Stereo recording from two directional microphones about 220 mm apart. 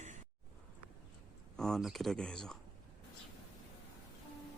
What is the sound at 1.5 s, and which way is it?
Speech, centre (ahead or behind).